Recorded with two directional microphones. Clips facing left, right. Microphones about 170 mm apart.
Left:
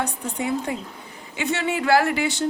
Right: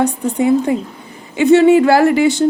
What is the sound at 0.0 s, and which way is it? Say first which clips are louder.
A woman's voice: right 12 dB; 30° right (ahead or behind).